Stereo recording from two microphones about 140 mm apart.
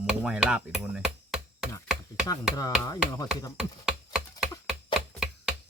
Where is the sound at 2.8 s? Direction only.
25° left (ahead or behind).